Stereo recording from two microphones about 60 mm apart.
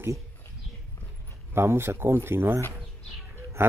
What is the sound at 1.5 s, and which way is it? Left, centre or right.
Speech, right.